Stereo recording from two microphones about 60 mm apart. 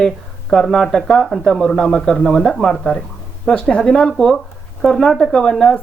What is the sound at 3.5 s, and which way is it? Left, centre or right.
Speech, centre.